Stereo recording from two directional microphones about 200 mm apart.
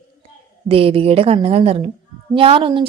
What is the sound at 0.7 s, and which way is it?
A woman's voice, 30° right (ahead or behind).